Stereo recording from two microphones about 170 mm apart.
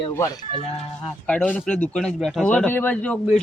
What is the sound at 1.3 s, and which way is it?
Speech, 5° left (ahead or behind).